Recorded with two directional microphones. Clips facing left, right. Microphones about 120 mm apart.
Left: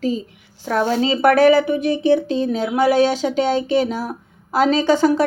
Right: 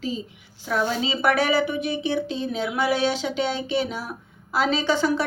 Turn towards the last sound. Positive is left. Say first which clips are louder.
# left 7 dB
turn(degrees=45)  # may be behind; listen again after turning